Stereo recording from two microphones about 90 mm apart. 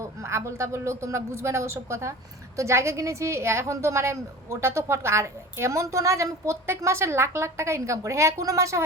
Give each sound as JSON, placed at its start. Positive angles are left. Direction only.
{"t": 0.0, "sound": "a woman's voice", "side_deg": -30}